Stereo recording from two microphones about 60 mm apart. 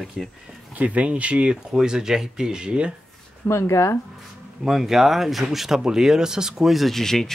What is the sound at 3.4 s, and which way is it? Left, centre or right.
Speech, left.